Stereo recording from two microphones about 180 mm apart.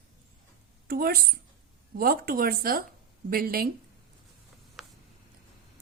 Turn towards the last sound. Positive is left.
turn(degrees=0)  # may be behind; listen again after turning